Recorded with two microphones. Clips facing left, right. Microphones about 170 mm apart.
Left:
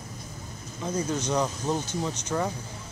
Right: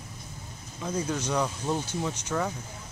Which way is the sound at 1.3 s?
15° left (ahead or behind).